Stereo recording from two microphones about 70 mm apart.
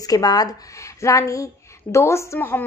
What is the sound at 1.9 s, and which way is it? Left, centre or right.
Speech, left.